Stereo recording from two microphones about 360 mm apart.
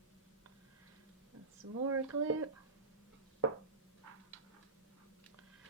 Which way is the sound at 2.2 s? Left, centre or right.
Right.